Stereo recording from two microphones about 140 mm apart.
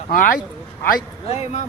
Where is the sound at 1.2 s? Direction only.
50° left (ahead or behind).